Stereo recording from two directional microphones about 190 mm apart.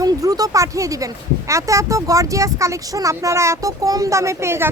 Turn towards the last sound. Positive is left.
turn(degrees=-15)  # may be behind; listen again after turning